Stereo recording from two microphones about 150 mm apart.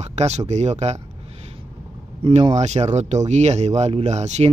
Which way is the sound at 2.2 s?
40° right (ahead or behind).